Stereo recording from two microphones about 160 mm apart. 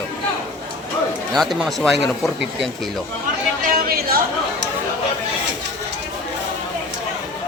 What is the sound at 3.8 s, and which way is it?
Speech, 70° right (ahead or behind).